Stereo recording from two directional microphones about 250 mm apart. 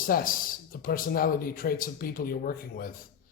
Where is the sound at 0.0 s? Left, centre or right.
Left.